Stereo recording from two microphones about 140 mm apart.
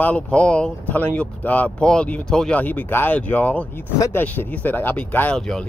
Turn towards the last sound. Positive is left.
turn(degrees=5)  # may be behind; listen again after turning